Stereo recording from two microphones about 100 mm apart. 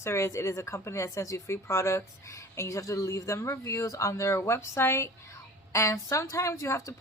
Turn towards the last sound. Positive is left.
turn(degrees=30)  # may be behind; listen again after turning